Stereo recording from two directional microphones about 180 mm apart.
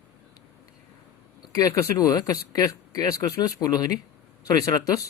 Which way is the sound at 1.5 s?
20° left (ahead or behind).